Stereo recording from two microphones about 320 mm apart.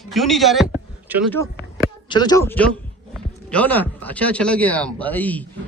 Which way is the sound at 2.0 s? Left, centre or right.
Centre.